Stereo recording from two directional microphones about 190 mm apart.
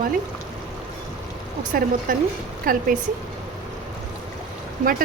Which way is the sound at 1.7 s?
50° right (ahead or behind).